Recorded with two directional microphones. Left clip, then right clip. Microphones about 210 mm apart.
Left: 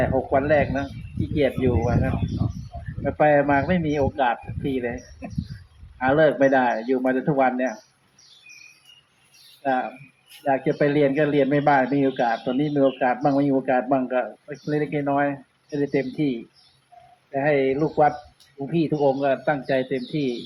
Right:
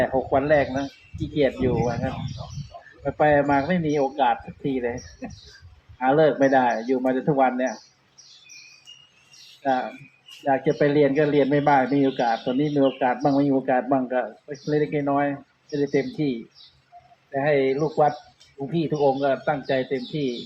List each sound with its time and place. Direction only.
0.0 s speech: 30° left (ahead or behind)
3.0 s speech: 25° left (ahead or behind)
6.0 s speech: 25° left (ahead or behind)
9.6 s speech: 25° left (ahead or behind)
17.3 s speech: 25° left (ahead or behind); by 20.2 s 45° left (ahead or behind)